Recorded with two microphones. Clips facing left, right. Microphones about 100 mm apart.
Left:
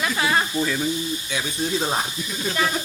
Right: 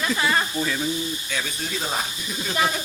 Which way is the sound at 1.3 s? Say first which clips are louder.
Left 4 dB; 15° left (ahead or behind).